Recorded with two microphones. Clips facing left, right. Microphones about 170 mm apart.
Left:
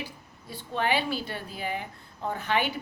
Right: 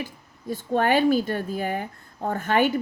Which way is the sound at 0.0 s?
45° right (ahead or behind).